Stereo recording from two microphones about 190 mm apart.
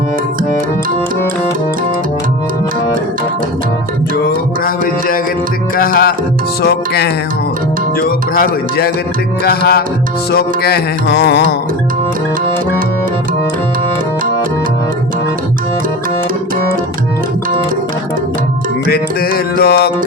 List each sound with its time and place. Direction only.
4.6 s speech: 50° left (ahead or behind)
6.6 s music: 60° left (ahead or behind)
7.9 s speech: 55° left (ahead or behind)
9.4 s music: 55° left (ahead or behind)
18.9 s music: 50° left (ahead or behind)